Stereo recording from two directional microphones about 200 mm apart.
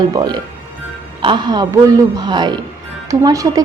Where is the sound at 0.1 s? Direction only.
20° right (ahead or behind).